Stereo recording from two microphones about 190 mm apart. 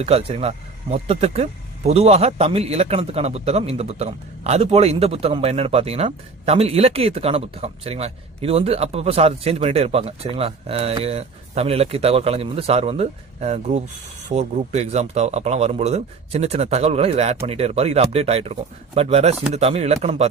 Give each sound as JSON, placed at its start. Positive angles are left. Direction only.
{"t": 0.0, "sound": "a man's voice", "side_deg": -30}